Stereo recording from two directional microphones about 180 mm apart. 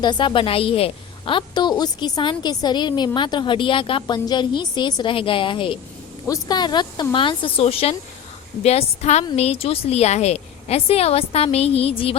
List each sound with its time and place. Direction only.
0.0 s a woman's voice: 25° left (ahead or behind)